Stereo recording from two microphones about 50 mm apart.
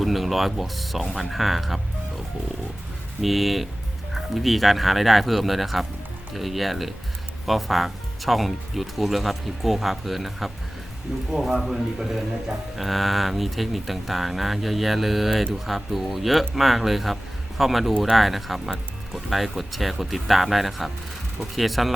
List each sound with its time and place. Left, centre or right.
0.0 s speech: centre